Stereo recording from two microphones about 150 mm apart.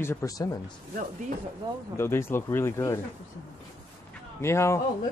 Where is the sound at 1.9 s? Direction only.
15° left (ahead or behind).